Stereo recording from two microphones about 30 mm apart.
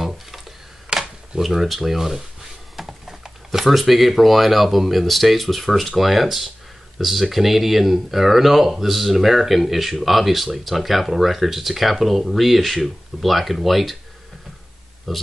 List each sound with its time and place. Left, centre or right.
0.9 s a sound: right
1.4 s speech: centre
15.1 s speech: centre